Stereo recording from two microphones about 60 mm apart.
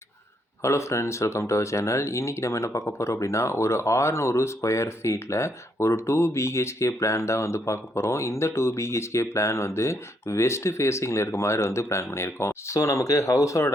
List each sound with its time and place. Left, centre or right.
0.6 s speech: left